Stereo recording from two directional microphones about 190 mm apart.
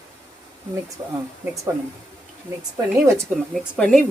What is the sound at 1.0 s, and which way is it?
Speech, 15° right (ahead or behind).